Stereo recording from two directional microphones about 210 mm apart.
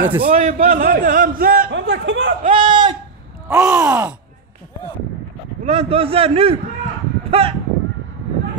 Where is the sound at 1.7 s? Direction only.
65° right (ahead or behind).